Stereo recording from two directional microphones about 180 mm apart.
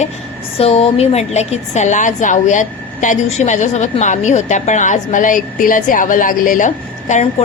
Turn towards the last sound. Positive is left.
turn(degrees=40)  # may be behind; listen again after turning